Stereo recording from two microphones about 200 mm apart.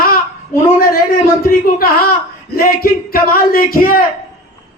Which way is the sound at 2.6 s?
45° left (ahead or behind).